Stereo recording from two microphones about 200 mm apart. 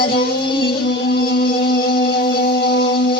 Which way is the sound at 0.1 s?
50° left (ahead or behind).